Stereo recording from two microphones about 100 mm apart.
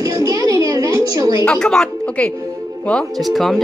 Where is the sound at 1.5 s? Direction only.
5° left (ahead or behind).